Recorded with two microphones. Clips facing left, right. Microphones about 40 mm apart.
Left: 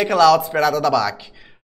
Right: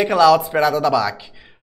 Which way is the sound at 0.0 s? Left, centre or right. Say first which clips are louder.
Even; centre.